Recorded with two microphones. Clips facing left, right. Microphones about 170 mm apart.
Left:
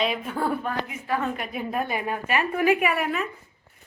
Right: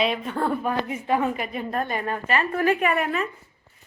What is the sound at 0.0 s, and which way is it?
Speech, centre (ahead or behind).